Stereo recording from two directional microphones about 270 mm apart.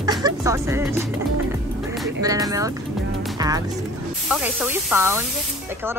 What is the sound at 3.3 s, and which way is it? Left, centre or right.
Music, centre.